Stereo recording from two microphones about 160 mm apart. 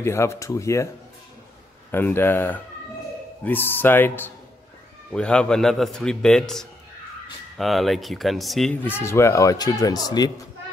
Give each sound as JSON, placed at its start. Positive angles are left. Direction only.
{"t": 0.0, "sound": "speech", "side_deg": 15}
{"t": 1.9, "sound": "a man's voice", "side_deg": 15}
{"t": 8.8, "sound": "speech", "side_deg": 15}